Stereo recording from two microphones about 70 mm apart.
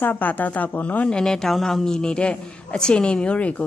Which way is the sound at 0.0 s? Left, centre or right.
Left.